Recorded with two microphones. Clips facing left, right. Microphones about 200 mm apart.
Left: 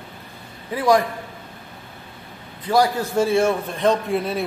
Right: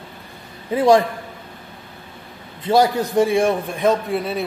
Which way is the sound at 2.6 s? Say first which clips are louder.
Right 3 dB; 25° right (ahead or behind).